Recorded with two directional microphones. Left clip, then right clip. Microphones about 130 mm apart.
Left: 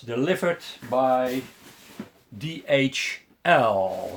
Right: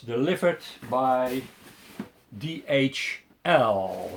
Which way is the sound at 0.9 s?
25° left (ahead or behind).